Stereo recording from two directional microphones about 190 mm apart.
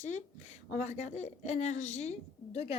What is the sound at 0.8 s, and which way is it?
A woman's voice, 35° left (ahead or behind).